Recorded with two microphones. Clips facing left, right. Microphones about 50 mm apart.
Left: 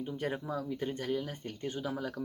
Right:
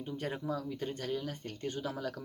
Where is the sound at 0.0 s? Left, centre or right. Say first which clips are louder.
Left 2 dB; centre.